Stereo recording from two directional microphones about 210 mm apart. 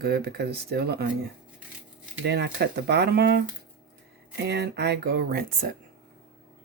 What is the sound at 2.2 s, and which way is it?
Speech, 50° right (ahead or behind).